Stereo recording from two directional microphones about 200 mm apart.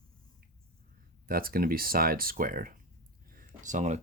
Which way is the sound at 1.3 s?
45° right (ahead or behind).